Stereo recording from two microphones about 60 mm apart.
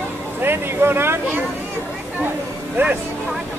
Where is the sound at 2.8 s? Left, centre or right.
Right.